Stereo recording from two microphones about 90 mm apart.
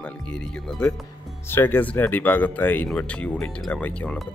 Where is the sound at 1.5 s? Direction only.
25° left (ahead or behind).